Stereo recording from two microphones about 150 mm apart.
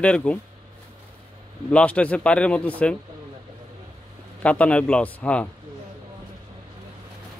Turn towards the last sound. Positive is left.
turn(degrees=10)  # may be behind; listen again after turning